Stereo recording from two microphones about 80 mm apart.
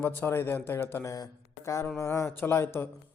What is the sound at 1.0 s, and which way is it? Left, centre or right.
A man's voice, left.